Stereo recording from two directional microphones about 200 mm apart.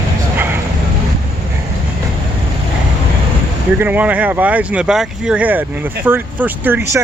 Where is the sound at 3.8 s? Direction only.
10° right (ahead or behind).